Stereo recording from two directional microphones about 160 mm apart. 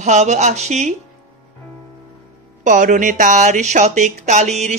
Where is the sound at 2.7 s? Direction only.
55° right (ahead or behind).